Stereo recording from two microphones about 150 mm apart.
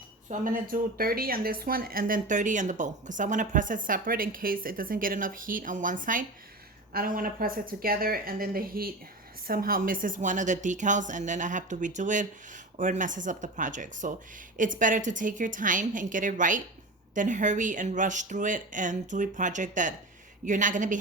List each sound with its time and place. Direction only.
0.3 s a woman's voice: 60° right (ahead or behind)